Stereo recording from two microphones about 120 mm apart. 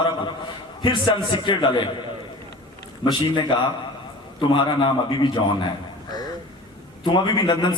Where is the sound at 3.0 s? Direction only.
40° left (ahead or behind).